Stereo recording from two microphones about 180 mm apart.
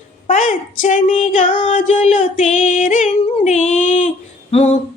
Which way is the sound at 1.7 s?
40° left (ahead or behind).